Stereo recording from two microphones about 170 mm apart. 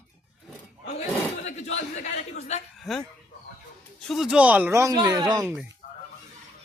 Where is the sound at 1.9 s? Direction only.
40° left (ahead or behind).